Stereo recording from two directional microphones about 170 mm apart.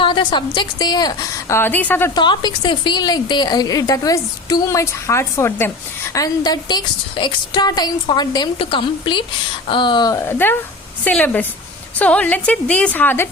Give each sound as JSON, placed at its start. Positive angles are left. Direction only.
{"t": 0.0, "sound": "a woman's voice", "side_deg": 25}
{"t": 2.1, "sound": "a woman's voice", "side_deg": 25}